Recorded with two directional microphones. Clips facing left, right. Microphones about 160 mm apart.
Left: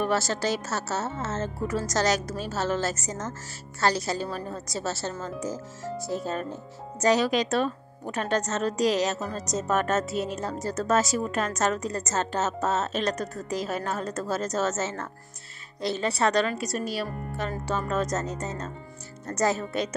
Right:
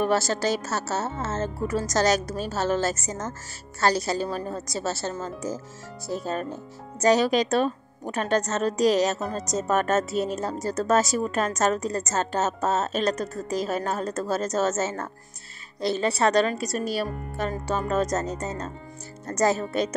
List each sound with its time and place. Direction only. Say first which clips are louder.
0.0 s speech: right 3 dB; 40° right (ahead or behind)
7.0 s speech: right 2 dB; 40° right (ahead or behind)